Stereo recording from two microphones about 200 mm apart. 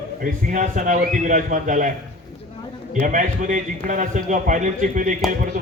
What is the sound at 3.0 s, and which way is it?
A man's voice, 40° right (ahead or behind).